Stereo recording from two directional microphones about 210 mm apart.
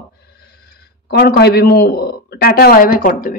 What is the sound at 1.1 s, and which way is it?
A woman's voice, 50° left (ahead or behind).